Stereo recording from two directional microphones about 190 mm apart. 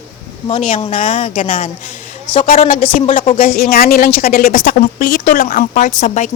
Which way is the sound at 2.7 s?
45° left (ahead or behind).